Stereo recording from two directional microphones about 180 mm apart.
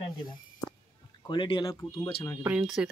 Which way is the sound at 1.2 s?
25° left (ahead or behind).